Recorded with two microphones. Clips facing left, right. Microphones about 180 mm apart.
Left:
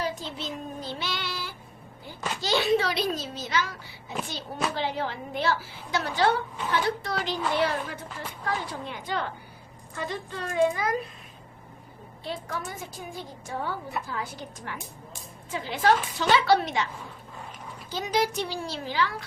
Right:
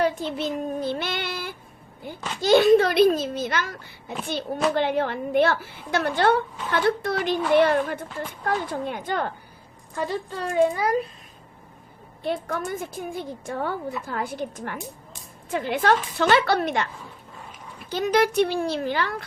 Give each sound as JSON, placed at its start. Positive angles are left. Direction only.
{"t": 0.0, "sound": "child singing", "side_deg": -60}
{"t": 2.4, "sound": "a child's voice", "side_deg": -50}
{"t": 10.4, "sound": "a child's voice", "side_deg": -35}
{"t": 12.2, "sound": "a woman's voice", "side_deg": -55}
{"t": 17.9, "sound": "a woman's voice", "side_deg": -60}